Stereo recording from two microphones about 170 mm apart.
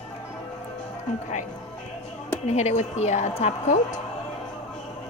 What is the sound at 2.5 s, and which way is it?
A woman's voice, 40° left (ahead or behind).